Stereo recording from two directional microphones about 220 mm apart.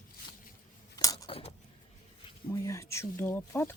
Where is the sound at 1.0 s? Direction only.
15° left (ahead or behind).